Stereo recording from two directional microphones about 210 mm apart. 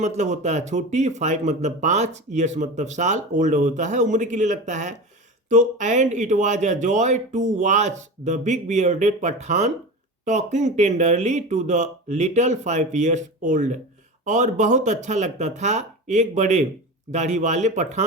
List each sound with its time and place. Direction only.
0.0 s a man's voice: 35° right (ahead or behind)